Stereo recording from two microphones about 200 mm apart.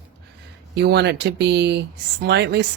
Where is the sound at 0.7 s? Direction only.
55° right (ahead or behind).